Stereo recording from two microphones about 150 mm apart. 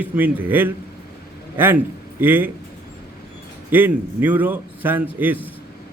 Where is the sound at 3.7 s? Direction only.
10° right (ahead or behind).